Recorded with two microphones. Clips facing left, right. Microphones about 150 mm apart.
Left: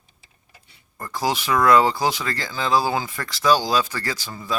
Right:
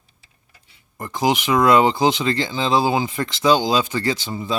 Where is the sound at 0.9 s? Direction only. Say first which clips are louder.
Right 4 dB; 20° right (ahead or behind).